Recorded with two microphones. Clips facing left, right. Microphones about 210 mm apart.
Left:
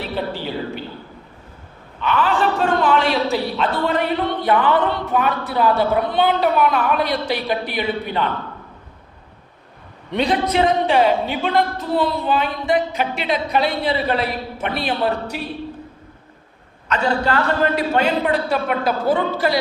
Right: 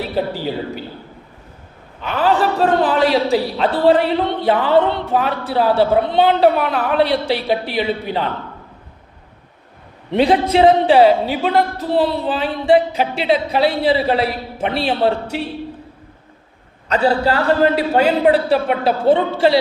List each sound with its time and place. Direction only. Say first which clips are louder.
2.0 s a man's voice: right 2 dB; 40° right (ahead or behind)
10.1 s a woman's voice: right 5 dB; 30° right (ahead or behind)
16.9 s a man's voice: right 4 dB; 35° right (ahead or behind)